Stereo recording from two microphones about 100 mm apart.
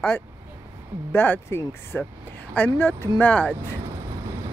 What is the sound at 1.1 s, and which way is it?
A man's voice, 20° left (ahead or behind).